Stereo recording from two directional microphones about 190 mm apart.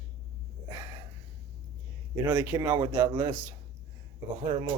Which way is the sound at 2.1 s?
20° right (ahead or behind).